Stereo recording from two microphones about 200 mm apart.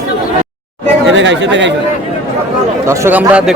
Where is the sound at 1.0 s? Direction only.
65° right (ahead or behind).